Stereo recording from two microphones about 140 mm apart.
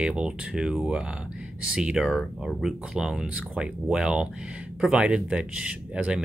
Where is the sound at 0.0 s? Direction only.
5° right (ahead or behind).